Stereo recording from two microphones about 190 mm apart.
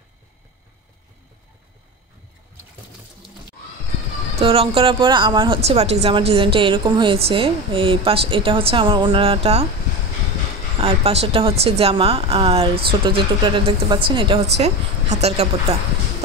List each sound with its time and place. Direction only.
4.4 s speech: 30° right (ahead or behind)
10.8 s speech: 30° right (ahead or behind)